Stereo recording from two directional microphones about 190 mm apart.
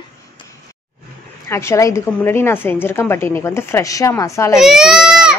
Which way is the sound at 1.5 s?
15° left (ahead or behind).